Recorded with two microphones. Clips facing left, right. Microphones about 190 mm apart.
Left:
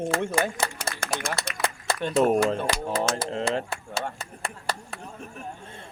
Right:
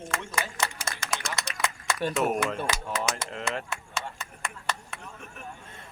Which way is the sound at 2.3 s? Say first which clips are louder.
Left 6 dB; 30° left (ahead or behind).